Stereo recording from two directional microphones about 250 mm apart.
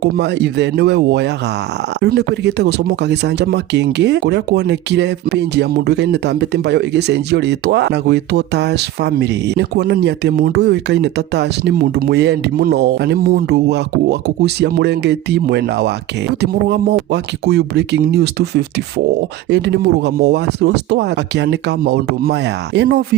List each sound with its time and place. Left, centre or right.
0.0 s speech: right